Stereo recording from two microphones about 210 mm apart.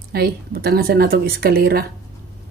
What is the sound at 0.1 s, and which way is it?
Speech, 45° right (ahead or behind).